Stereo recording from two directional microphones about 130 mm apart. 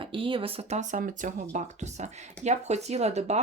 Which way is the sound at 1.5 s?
60° right (ahead or behind).